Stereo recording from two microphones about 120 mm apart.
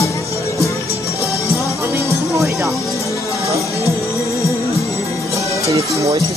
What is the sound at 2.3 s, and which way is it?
Speech, 25° right (ahead or behind).